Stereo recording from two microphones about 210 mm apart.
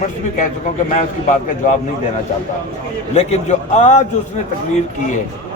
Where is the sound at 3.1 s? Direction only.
30° left (ahead or behind).